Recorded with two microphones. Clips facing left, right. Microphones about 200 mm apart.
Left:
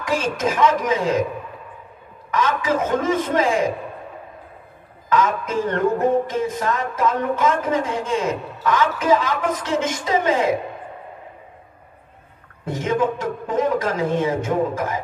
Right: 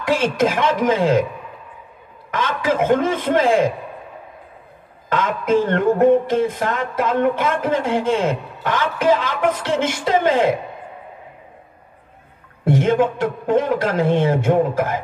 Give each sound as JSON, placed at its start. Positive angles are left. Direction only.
{"t": 0.2, "sound": "a man's voice", "side_deg": -60}
{"t": 2.3, "sound": "a man's voice", "side_deg": -60}
{"t": 5.1, "sound": "a man's voice", "side_deg": -60}
{"t": 12.6, "sound": "a man's voice", "side_deg": -60}